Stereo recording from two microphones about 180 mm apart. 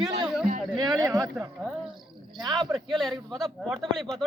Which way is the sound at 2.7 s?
Centre (ahead or behind).